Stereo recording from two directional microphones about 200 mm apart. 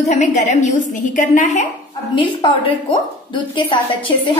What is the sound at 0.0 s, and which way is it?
A woman's voice, 35° left (ahead or behind).